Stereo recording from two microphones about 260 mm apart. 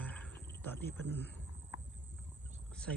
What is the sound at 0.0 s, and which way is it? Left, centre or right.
Insect, centre.